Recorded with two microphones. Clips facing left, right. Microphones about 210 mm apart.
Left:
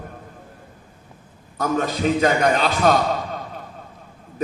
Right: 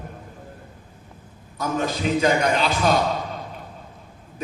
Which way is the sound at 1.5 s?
50° left (ahead or behind).